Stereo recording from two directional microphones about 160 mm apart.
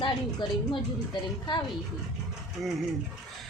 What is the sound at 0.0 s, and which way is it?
Speech, 30° left (ahead or behind).